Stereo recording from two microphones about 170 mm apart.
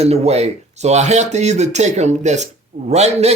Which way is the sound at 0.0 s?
40° right (ahead or behind).